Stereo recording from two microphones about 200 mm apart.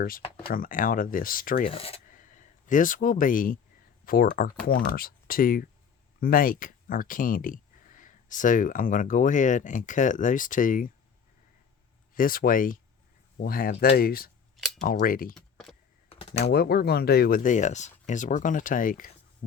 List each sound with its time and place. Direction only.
0.5 s speech: 45° left (ahead or behind)
1.7 s speech: 30° left (ahead or behind)
2.0 s a sound: 40° left (ahead or behind)
4.0 s speech: 45° left (ahead or behind)
12.1 s speech: 45° left (ahead or behind)
15.4 s computer keyboard: centre (ahead or behind)
16.4 s speech: 50° left (ahead or behind)